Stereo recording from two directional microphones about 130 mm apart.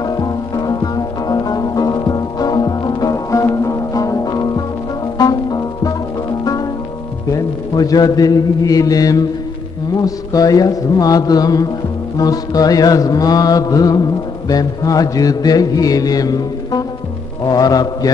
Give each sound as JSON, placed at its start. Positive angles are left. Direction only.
{"t": 0.0, "sound": "music", "side_deg": 30}
{"t": 7.2, "sound": "mantra", "side_deg": 25}